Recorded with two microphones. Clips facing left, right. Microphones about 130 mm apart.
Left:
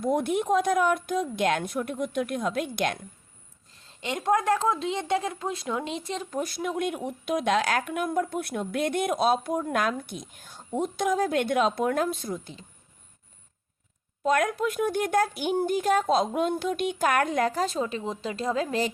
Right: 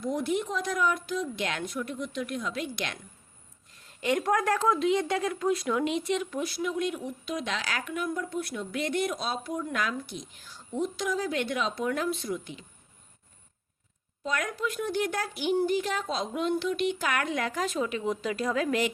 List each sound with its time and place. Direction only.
0.0 s speech: 55° left (ahead or behind)
3.7 s a woman's voice: 25° left (ahead or behind)
14.3 s a woman's voice: 50° left (ahead or behind); by 18.9 s 30° left (ahead or behind)